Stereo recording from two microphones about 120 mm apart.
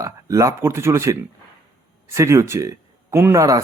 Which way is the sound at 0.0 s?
25° right (ahead or behind).